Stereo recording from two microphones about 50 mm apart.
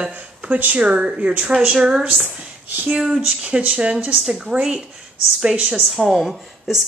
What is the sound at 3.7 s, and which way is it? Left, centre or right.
Speech, centre.